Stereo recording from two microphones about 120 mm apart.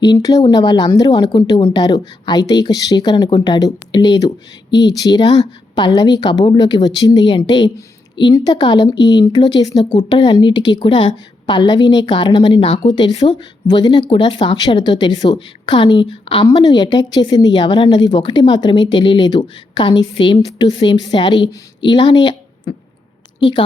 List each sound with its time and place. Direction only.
0.0 s a woman's voice: 35° left (ahead or behind)